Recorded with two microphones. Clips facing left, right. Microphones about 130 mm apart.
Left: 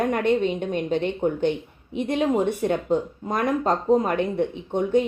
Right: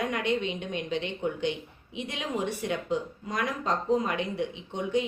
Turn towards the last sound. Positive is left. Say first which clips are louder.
# left 7 dB
turn(degrees=50)  # may be behind; listen again after turning